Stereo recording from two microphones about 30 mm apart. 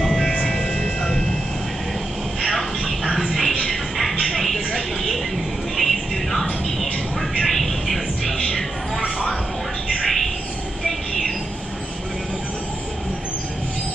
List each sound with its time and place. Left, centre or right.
0.3 s music: left
2.4 s music: centre
3.6 s a sound: centre
5.8 s music: centre
6.8 s a sound: centre
10.0 s bird: centre
10.9 s train: centre